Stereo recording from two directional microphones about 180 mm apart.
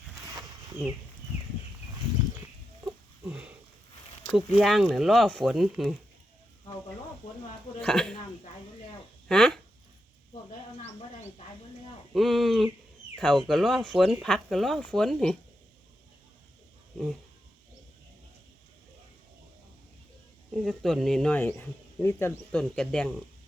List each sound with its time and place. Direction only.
2.8 s a sound: 10° right (ahead or behind)
4.4 s speech: centre (ahead or behind)
7.8 s speech: 5° left (ahead or behind)
9.3 s a sound: 5° left (ahead or behind)
12.1 s speech: centre (ahead or behind)
20.5 s speech: centre (ahead or behind)